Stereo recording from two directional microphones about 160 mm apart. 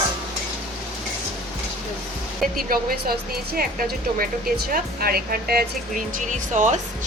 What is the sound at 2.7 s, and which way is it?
A woman's voice, 70° right (ahead or behind).